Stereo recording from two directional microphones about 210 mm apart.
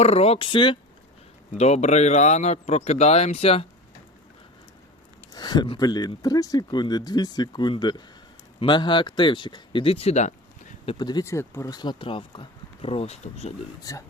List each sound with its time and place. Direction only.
0.0 s speech: 30° left (ahead or behind)
5.3 s speech: 20° left (ahead or behind)
10.8 s speech: 20° left (ahead or behind)